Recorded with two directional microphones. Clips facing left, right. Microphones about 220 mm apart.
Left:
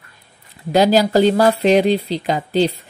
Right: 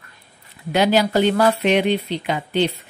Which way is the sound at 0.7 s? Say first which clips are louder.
Left 4 dB; 35° left (ahead or behind).